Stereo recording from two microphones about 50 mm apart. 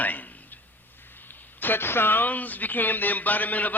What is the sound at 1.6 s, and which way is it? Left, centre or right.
Speech, left.